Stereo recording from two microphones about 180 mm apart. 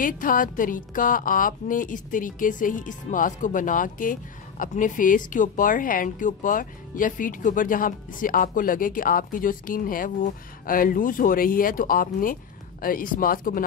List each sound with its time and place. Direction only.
0.0 s a woman's voice: 50° left (ahead or behind)